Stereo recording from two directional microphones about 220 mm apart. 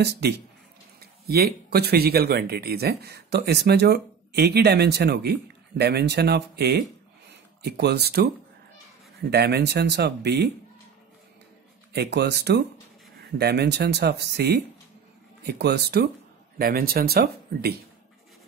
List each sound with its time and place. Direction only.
0.0 s speech: 50° right (ahead or behind)
9.3 s speech: 50° right (ahead or behind)
11.9 s speech: 50° right (ahead or behind)